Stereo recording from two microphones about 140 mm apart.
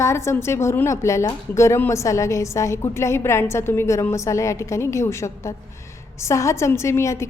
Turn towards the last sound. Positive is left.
turn(degrees=20)  # may be behind; listen again after turning